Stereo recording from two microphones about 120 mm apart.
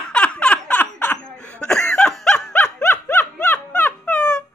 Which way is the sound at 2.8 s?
20° left (ahead or behind).